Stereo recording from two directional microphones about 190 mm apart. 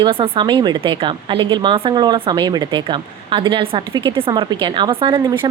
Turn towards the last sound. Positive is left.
turn(degrees=-25)  # may be behind; listen again after turning